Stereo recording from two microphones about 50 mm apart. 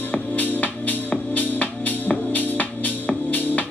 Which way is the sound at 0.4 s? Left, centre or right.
Left.